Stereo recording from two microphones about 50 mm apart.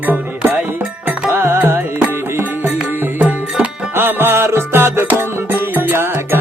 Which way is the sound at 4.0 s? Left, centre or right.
Right.